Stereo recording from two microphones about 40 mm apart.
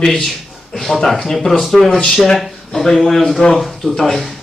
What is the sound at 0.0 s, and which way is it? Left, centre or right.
A man's voice, centre.